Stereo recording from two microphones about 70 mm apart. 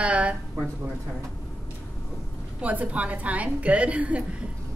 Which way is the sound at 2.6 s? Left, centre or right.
Right.